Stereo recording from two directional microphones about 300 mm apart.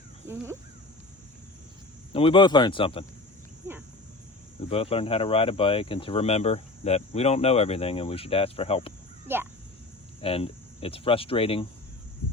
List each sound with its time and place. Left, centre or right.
2.1 s speech: centre
4.7 s speech: centre
9.2 s speech: centre
10.2 s speech: centre